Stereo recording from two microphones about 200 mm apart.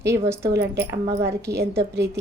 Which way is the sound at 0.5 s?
55° right (ahead or behind).